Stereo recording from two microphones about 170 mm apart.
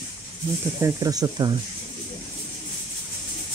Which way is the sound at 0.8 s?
20° right (ahead or behind).